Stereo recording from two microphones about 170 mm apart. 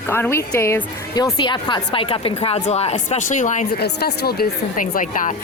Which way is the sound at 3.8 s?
70° left (ahead or behind).